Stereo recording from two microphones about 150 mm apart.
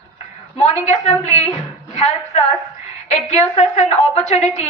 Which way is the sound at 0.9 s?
50° left (ahead or behind).